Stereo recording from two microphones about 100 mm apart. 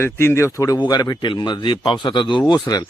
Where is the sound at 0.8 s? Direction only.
45° left (ahead or behind).